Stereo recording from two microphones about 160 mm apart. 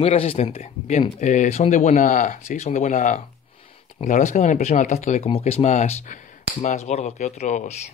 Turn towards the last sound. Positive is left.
turn(degrees=45)  # may be behind; listen again after turning